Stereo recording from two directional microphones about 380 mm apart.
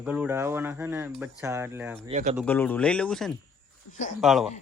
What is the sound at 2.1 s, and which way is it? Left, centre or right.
Speech, centre.